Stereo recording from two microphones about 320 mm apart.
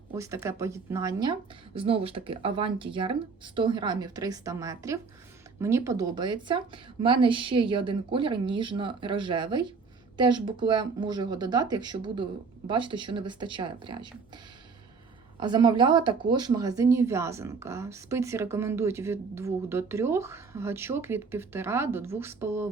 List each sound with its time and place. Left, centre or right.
0.1 s speech: centre
15.4 s speech: centre